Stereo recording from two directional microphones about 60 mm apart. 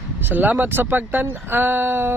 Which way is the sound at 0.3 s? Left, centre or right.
Right.